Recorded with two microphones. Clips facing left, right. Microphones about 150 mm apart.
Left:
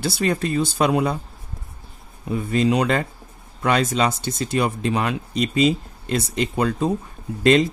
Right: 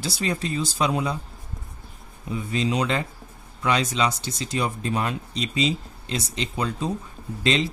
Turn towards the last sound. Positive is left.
turn(degrees=50)  # may be behind; listen again after turning